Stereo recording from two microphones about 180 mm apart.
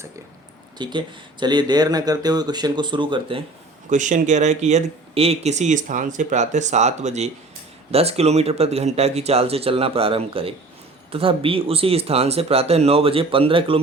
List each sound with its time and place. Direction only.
0.8 s speech: 25° right (ahead or behind)
3.8 s speech: 45° right (ahead or behind)